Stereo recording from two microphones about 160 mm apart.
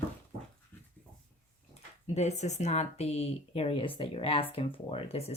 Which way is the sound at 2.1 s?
45° left (ahead or behind).